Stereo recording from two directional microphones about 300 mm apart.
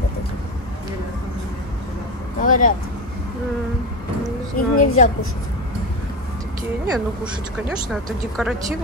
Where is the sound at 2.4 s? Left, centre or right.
Left.